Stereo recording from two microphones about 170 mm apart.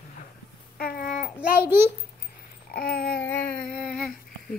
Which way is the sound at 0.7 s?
65° left (ahead or behind).